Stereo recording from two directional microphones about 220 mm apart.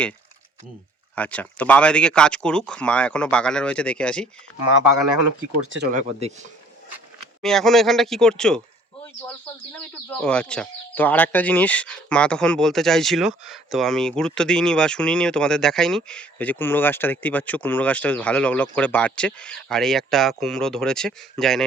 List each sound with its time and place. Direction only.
1.1 s speech: 5° left (ahead or behind)
5.6 s speech: 60° right (ahead or behind)
5.9 s speech: 30° right (ahead or behind)
7.4 s speech: centre (ahead or behind)
9.7 s speech: 5° left (ahead or behind)